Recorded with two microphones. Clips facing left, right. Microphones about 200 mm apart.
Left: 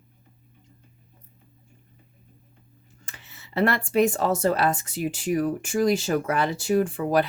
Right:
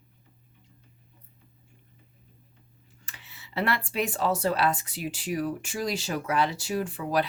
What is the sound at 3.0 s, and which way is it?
Speech, 45° left (ahead or behind).